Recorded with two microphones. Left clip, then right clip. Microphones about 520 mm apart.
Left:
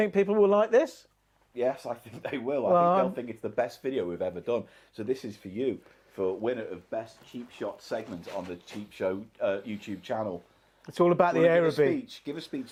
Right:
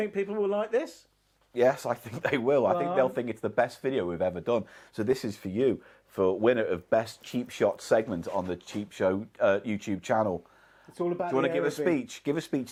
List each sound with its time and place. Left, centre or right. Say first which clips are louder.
0.0 s speech: left 6 dB; left
1.5 s speech: right 5 dB; right
10.9 s speech: left 8 dB; left
11.6 s speech: left 3 dB; right